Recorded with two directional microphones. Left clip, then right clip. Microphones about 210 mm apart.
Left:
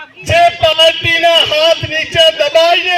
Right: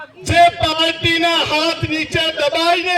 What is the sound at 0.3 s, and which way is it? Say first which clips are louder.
A man's voice: left 3 dB; 55° right (ahead or behind).